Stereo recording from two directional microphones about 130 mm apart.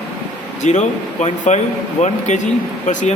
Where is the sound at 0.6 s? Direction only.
65° left (ahead or behind).